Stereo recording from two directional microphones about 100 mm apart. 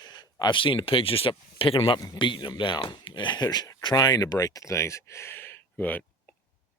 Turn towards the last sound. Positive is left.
turn(degrees=15)  # may be behind; listen again after turning